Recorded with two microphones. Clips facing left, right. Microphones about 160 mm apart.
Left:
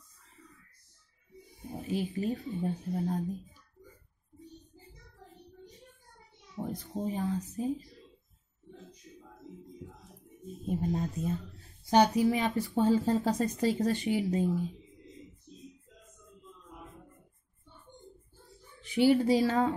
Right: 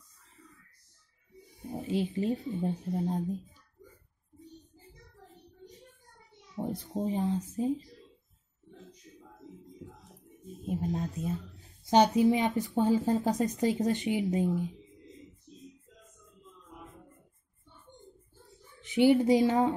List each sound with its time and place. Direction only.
1.8 s speech: 25° right (ahead or behind)
6.5 s speech: 30° right (ahead or behind)
10.6 s speech: centre (ahead or behind)
11.8 s speech: 20° right (ahead or behind)
18.8 s a woman's voice: 20° right (ahead or behind)